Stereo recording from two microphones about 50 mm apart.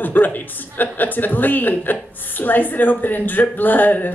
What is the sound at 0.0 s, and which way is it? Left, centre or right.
A woman's voice, left.